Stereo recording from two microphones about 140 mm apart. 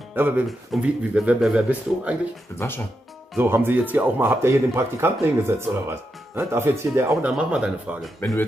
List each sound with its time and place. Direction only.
0.1 s speech: 15° right (ahead or behind)
2.6 s speech: 15° left (ahead or behind)
3.3 s speech: 15° right (ahead or behind)